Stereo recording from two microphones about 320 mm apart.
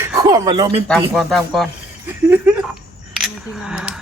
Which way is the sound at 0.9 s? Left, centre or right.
Centre.